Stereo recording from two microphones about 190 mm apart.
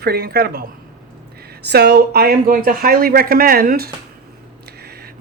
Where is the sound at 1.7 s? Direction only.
55° right (ahead or behind).